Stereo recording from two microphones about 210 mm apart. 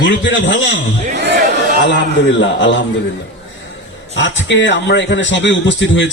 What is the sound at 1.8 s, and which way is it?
A man's voice, 60° left (ahead or behind).